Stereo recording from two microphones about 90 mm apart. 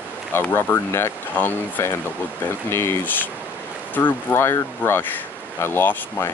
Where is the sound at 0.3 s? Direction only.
25° left (ahead or behind).